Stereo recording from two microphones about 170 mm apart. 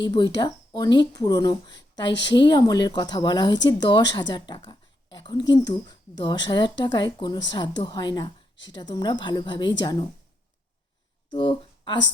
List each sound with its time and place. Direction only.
0.0 s a woman's voice: 25° left (ahead or behind)
11.3 s speech: 25° left (ahead or behind)